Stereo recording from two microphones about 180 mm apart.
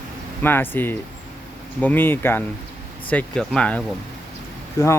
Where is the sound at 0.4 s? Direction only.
10° left (ahead or behind).